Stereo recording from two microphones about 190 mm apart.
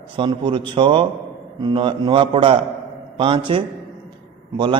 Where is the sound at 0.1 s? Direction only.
25° right (ahead or behind).